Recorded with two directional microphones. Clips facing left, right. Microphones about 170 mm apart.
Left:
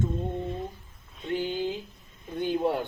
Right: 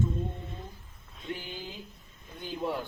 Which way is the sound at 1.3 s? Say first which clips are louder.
Left 10 dB; 55° left (ahead or behind).